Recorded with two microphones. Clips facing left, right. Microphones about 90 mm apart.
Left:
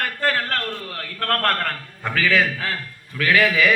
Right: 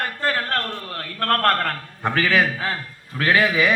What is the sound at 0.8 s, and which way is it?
A man's voice, 35° right (ahead or behind).